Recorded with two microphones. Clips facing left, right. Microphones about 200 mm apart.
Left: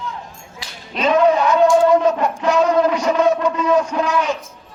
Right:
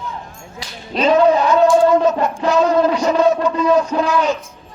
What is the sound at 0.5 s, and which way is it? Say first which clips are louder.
Whip: right 5 dB; 35° right (ahead or behind).